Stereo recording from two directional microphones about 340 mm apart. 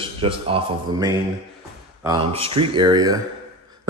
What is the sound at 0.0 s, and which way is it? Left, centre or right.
A man's voice, centre.